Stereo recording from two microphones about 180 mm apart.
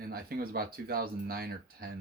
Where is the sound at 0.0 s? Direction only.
55° right (ahead or behind).